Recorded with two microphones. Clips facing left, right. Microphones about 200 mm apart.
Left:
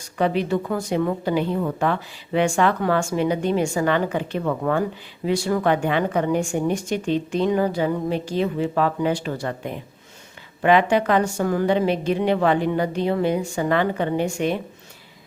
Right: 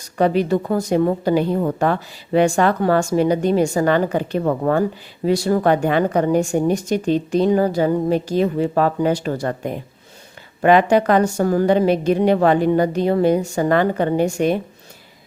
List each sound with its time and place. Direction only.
0.2 s a woman's voice: 40° right (ahead or behind)